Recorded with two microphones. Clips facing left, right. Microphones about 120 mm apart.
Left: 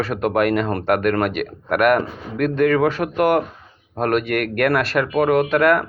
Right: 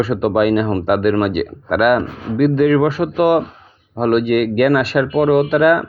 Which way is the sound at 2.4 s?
5° right (ahead or behind).